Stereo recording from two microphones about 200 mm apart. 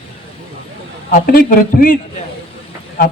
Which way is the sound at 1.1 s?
45° left (ahead or behind).